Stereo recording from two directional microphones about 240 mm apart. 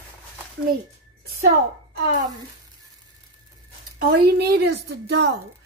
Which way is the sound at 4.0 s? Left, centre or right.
Right.